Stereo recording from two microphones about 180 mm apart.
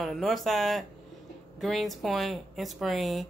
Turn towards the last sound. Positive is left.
turn(degrees=0)  # may be behind; listen again after turning